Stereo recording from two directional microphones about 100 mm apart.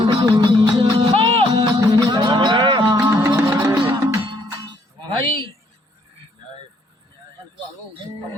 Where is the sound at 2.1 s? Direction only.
45° right (ahead or behind).